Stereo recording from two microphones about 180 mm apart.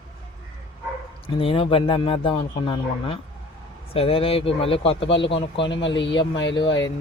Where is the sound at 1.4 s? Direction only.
30° left (ahead or behind).